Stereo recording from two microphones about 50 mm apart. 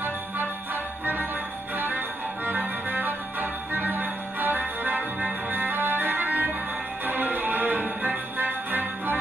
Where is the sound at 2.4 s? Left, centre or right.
Right.